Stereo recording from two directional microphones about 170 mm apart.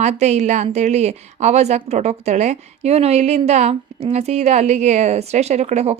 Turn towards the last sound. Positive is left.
turn(degrees=-40)  # may be behind; listen again after turning